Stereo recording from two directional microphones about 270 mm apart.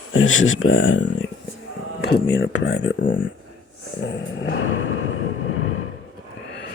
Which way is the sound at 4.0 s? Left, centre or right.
Left.